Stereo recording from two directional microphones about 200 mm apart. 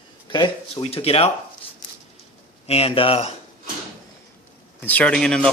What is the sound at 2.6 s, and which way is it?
Speech, 30° left (ahead or behind).